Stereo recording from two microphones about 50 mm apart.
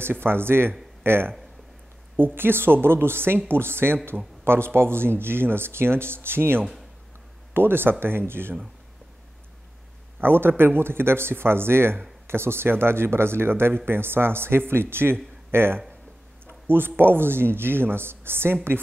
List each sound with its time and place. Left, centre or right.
0.0 s speech: right
10.2 s speech: right